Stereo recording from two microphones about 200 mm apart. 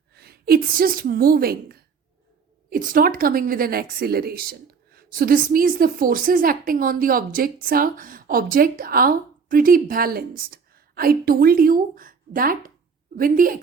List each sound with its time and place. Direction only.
0.1 s a woman's voice: 50° right (ahead or behind)